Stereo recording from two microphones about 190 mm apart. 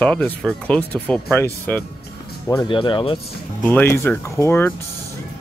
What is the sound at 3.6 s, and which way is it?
Speech, 10° left (ahead or behind).